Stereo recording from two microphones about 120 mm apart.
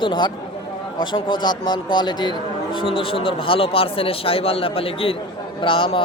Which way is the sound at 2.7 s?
50° left (ahead or behind).